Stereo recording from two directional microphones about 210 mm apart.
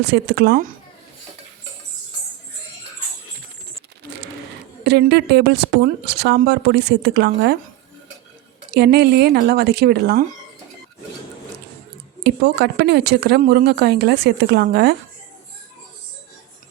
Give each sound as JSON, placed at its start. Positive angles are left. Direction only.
{"t": 0.0, "sound": "a woman's voice", "side_deg": -55}
{"t": 4.8, "sound": "a woman's voice", "side_deg": -55}
{"t": 8.7, "sound": "a woman's voice", "side_deg": -50}
{"t": 12.2, "sound": "a woman's voice", "side_deg": -50}